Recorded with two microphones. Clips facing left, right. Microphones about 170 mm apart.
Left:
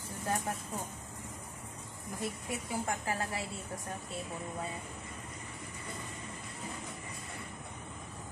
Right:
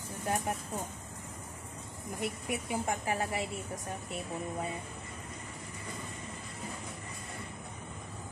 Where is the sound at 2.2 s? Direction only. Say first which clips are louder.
Right 3 dB; 20° right (ahead or behind).